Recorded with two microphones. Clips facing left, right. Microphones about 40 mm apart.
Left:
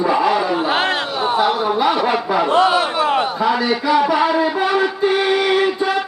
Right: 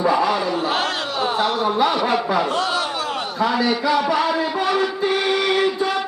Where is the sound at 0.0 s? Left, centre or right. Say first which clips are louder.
Left 2 dB; centre.